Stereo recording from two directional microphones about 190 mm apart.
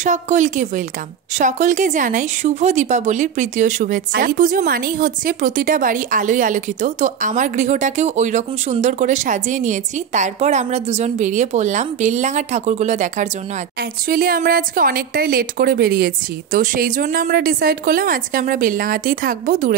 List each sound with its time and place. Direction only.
0.0 s a woman's voice: 40° right (ahead or behind)
14.0 s a woman's voice: 50° right (ahead or behind)